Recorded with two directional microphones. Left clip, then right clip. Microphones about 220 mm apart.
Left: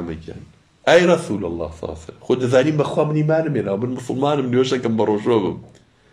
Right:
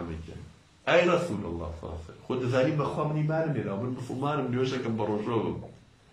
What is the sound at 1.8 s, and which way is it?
A man's voice, 40° left (ahead or behind).